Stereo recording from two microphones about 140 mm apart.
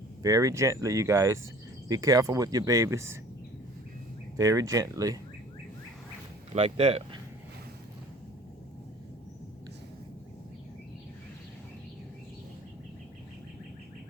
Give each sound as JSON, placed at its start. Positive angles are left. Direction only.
{"t": 0.2, "sound": "speech", "side_deg": -25}
{"t": 4.4, "sound": "speech", "side_deg": -25}
{"t": 6.5, "sound": "speech", "side_deg": -45}